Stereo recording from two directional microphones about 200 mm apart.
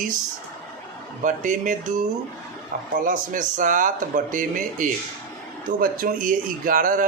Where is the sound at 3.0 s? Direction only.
40° right (ahead or behind).